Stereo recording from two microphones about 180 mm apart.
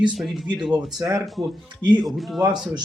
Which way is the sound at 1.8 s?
25° right (ahead or behind).